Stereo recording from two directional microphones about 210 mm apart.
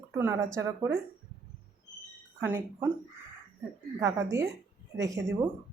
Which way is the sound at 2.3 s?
10° right (ahead or behind).